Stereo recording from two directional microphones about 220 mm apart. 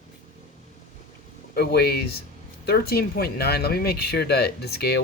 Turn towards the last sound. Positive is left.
turn(degrees=45)  # may be behind; listen again after turning